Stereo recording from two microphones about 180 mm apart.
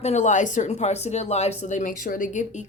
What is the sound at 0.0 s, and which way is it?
A woman's voice, 40° left (ahead or behind).